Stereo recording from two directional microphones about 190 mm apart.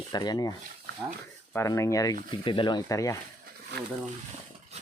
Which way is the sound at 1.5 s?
15° left (ahead or behind).